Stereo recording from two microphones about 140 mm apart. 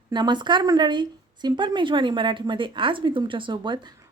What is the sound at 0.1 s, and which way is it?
Speech, 30° right (ahead or behind).